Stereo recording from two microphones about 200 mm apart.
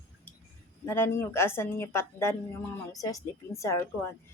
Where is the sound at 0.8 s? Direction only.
10° left (ahead or behind).